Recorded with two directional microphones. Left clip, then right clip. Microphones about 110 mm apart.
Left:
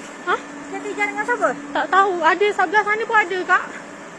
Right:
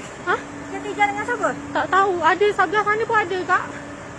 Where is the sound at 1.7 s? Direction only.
10° right (ahead or behind).